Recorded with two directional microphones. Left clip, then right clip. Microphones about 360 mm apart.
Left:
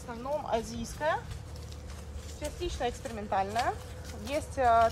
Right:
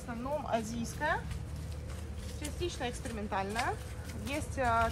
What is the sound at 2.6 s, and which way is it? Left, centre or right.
Speech, left.